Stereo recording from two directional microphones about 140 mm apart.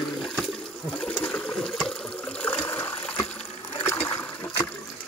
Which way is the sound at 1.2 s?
10° left (ahead or behind).